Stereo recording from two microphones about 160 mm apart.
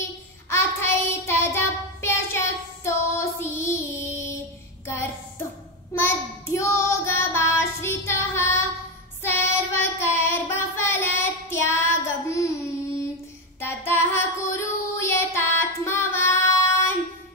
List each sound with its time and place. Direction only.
0.5 s child singing: 15° left (ahead or behind)
13.6 s child singing: 15° left (ahead or behind)